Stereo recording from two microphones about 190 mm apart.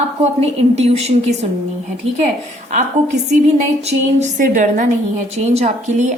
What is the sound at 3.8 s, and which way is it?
Music, 40° right (ahead or behind).